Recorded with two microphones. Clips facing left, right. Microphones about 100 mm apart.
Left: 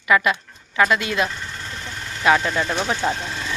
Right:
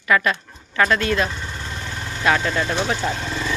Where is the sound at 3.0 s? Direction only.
30° left (ahead or behind).